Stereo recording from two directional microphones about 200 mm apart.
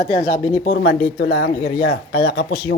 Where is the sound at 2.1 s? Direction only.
75° left (ahead or behind).